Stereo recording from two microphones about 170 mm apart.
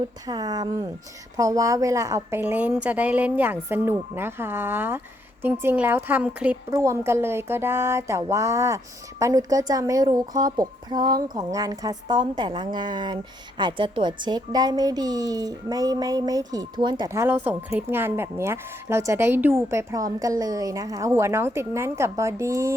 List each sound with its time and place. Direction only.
0.3 s a woman's voice: 25° right (ahead or behind); by 6.6 s 10° right (ahead or behind)
6.7 s a woman's voice: 20° right (ahead or behind)
17.1 s a woman's voice: 15° right (ahead or behind)